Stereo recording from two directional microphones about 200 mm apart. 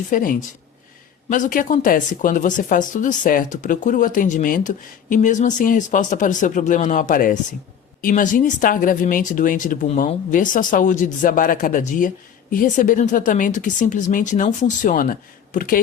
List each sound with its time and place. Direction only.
0.1 s speech: 40° left (ahead or behind)